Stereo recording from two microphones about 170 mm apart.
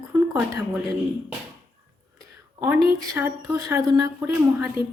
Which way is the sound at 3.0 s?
15° right (ahead or behind).